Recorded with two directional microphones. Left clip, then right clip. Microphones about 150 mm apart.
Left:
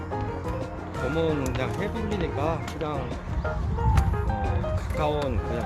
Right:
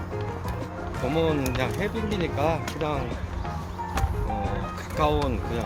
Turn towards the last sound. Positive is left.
turn(degrees=-25)  # may be behind; listen again after turning